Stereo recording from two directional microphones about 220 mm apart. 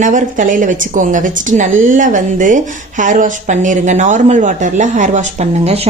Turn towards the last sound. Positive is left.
turn(degrees=-30)  # may be behind; listen again after turning